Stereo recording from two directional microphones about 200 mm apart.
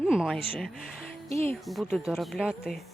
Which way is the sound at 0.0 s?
5° right (ahead or behind).